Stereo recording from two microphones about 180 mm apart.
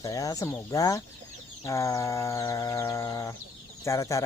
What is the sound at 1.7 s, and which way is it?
Chicken, 15° left (ahead or behind).